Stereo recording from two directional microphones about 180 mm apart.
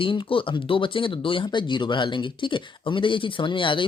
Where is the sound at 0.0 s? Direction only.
30° left (ahead or behind).